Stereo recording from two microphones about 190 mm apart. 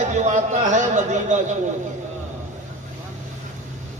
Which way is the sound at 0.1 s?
40° right (ahead or behind).